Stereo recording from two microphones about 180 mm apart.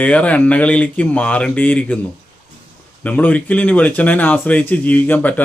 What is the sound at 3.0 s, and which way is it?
Speech, 10° left (ahead or behind).